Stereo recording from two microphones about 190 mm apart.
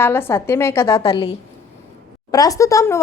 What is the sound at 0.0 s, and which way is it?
Speech, 10° left (ahead or behind).